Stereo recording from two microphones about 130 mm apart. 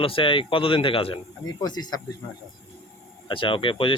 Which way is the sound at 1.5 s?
30° left (ahead or behind).